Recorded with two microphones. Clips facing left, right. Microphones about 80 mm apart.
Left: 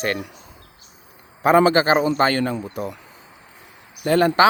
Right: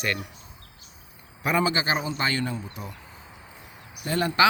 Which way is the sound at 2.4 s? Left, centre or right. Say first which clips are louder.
Left 8 dB; left.